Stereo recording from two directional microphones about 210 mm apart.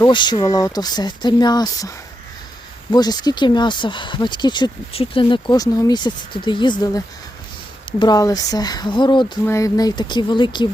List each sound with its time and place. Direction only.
0.0 s speech: 20° left (ahead or behind)
2.9 s speech: 20° left (ahead or behind)